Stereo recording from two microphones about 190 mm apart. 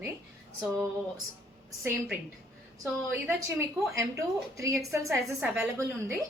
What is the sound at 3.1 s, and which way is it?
A woman's voice, 15° right (ahead or behind).